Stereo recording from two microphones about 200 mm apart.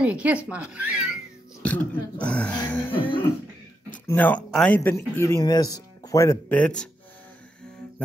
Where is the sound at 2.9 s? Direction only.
25° left (ahead or behind).